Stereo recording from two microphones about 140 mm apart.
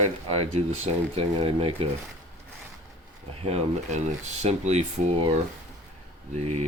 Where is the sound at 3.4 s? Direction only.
50° right (ahead or behind).